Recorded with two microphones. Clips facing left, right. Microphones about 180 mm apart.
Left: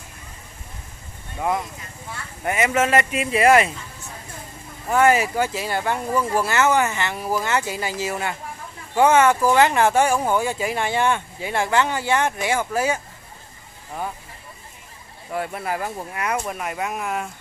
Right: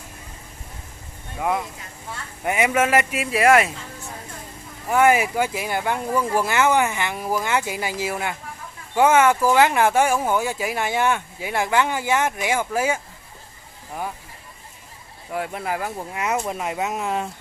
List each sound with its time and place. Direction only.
2.4 s speech: 15° right (ahead or behind)
4.8 s speech: 10° right (ahead or behind)
15.3 s speech: 10° right (ahead or behind)